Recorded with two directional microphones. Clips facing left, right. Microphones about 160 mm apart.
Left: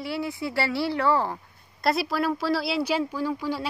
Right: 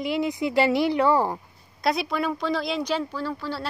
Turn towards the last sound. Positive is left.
turn(degrees=10)  # may be behind; listen again after turning